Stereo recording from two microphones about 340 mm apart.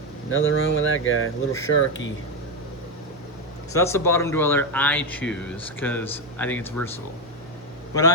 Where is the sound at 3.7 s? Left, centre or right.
Centre.